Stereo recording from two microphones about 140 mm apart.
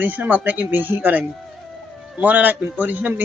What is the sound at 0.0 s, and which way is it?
A man's voice, 10° right (ahead or behind).